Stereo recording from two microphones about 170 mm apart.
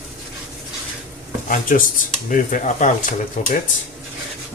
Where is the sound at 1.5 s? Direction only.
55° left (ahead or behind).